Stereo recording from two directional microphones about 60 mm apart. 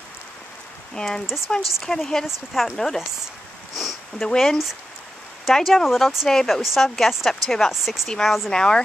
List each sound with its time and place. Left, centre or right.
0.9 s speech: centre
2.2 s speech: centre
3.7 s sniff: centre
4.3 s speech: centre
8.5 s speech: centre